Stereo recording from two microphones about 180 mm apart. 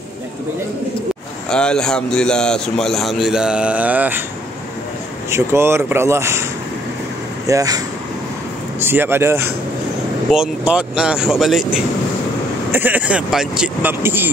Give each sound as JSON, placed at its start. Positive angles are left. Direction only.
{"t": 1.5, "sound": "a man's voice", "side_deg": 5}
{"t": 5.3, "sound": "speech", "side_deg": -15}
{"t": 7.4, "sound": "a man's voice", "side_deg": -20}